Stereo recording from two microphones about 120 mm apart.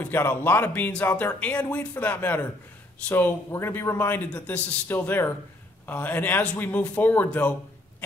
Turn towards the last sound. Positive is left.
turn(degrees=15)  # may be behind; listen again after turning